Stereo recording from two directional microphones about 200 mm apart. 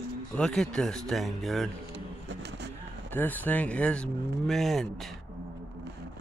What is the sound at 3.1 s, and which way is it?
Speech, 10° left (ahead or behind).